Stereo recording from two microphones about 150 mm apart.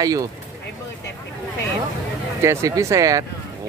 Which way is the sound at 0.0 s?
25° right (ahead or behind).